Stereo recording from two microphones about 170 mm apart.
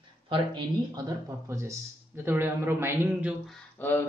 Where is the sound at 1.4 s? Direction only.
15° right (ahead or behind).